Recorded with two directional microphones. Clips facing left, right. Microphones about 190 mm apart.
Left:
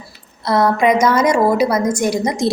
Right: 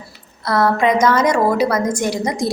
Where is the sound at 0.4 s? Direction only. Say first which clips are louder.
Left 2 dB; 20° left (ahead or behind).